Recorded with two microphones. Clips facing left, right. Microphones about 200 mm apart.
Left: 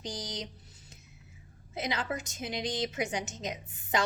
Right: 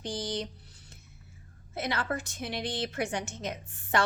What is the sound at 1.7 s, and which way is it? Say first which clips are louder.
Speech: right 1 dB; 15° left (ahead or behind).